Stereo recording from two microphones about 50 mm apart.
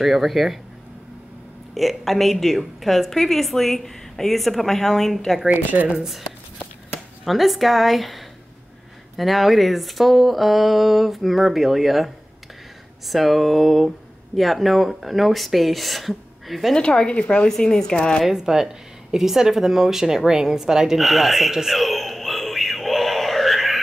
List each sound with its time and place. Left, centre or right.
0.0 s speech: centre
1.7 s speech: centre
5.5 s speech: right
5.9 s speech: centre
7.2 s speech: centre
16.7 s a woman's voice: centre
18.2 s a woman's voice: centre
20.2 s a sound: centre